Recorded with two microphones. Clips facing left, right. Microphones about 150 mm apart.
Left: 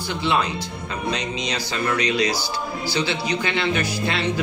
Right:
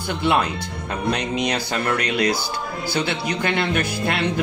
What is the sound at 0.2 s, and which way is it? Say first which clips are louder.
Speech: right 2 dB; 55° right (ahead or behind).